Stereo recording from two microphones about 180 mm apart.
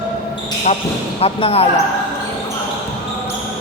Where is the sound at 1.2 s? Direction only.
35° left (ahead or behind).